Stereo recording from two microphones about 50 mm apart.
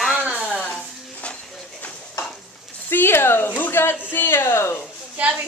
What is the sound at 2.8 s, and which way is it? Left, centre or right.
Speech, left.